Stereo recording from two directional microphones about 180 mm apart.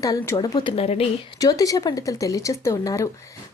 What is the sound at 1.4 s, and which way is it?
Speech, 20° left (ahead or behind).